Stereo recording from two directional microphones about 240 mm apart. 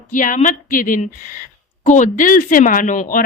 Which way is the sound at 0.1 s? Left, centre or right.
Left.